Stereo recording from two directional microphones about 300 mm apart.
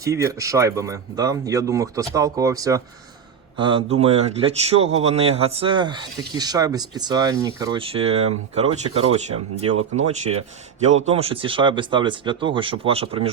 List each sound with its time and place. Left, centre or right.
0.0 s speech: centre